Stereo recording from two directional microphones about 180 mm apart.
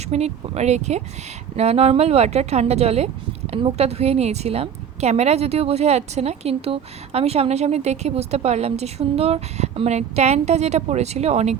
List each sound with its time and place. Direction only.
0.1 s speech: 35° right (ahead or behind)